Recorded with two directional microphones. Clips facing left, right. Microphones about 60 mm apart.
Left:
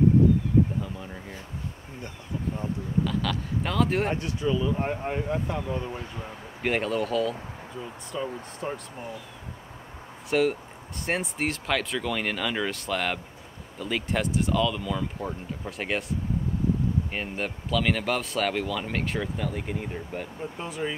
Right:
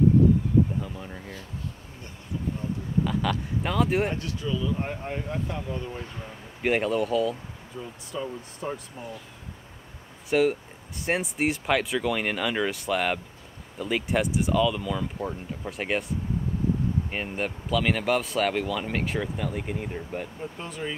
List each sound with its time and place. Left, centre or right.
0.8 s speech: centre
3.0 s speech: centre
4.1 s speech: left
6.6 s speech: centre
10.3 s speech: centre